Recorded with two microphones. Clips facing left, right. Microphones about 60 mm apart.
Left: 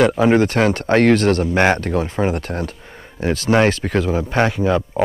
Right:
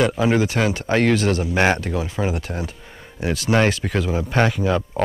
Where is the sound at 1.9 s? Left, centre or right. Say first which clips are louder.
Left 4 dB; left.